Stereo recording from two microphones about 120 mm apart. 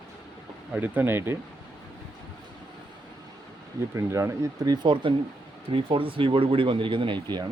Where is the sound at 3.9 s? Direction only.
25° right (ahead or behind); by 7.4 s 40° right (ahead or behind).